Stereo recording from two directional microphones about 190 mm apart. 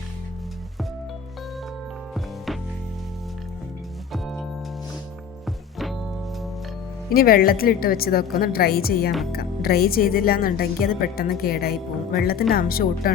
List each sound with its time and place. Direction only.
7.1 s speech: 50° left (ahead or behind)